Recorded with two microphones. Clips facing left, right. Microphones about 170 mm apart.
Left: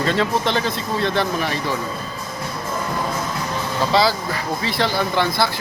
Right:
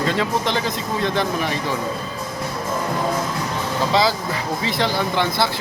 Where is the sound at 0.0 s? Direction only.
15° right (ahead or behind).